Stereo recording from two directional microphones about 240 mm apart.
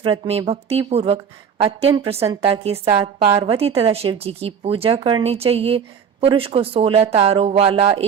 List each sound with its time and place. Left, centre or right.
0.0 s a woman's voice: right